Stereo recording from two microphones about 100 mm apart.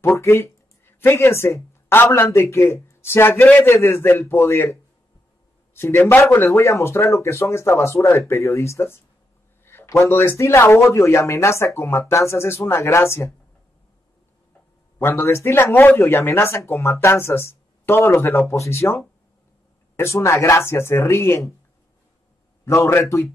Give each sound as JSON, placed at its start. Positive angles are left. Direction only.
{"t": 0.1, "sound": "speech", "side_deg": 30}
{"t": 5.8, "sound": "speech", "side_deg": 25}
{"t": 15.0, "sound": "speech", "side_deg": 25}
{"t": 22.7, "sound": "speech", "side_deg": 30}